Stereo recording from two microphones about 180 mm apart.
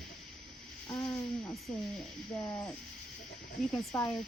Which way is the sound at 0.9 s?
15° left (ahead or behind).